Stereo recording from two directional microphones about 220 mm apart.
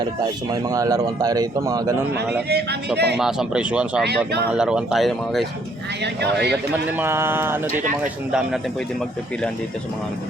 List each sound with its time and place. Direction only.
0.5 s speech: 15° right (ahead or behind)
2.5 s speech: 50° right (ahead or behind)
3.2 s speech: centre (ahead or behind)
6.0 s speech: 50° right (ahead or behind)
6.9 s speech: 10° right (ahead or behind)